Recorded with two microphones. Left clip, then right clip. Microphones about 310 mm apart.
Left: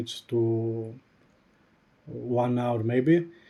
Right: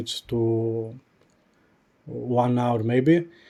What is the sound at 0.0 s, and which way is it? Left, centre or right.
Speech, right.